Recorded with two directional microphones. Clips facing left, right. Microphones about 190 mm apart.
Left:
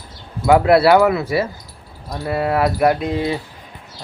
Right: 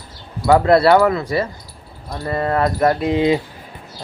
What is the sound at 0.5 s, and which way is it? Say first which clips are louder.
Speech: even; 5° left (ahead or behind).